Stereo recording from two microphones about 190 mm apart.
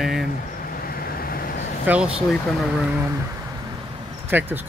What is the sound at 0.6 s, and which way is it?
Vehicle, 50° left (ahead or behind).